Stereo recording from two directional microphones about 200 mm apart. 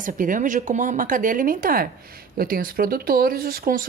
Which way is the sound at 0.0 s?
40° right (ahead or behind).